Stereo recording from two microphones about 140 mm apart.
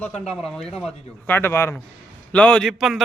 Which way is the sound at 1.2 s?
15° left (ahead or behind).